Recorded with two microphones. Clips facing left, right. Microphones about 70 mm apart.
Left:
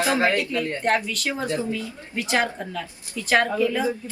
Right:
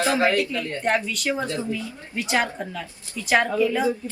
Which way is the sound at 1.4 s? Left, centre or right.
Left.